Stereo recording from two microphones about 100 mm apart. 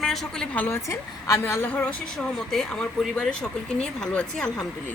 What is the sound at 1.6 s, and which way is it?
Speech, 15° left (ahead or behind).